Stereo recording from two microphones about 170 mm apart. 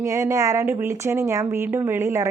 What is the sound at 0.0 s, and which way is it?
Speech, 15° right (ahead or behind).